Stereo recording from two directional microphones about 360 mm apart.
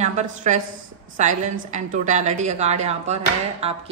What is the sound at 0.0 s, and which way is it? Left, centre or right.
A woman's voice, centre.